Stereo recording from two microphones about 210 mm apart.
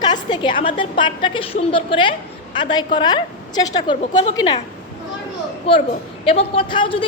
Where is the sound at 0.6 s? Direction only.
25° left (ahead or behind).